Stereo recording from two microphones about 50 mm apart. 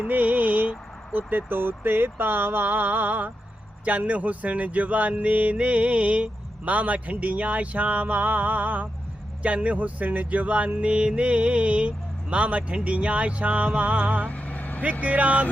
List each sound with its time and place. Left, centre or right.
0.1 s speech: right
14.3 s vehicle: left
15.0 s speech: right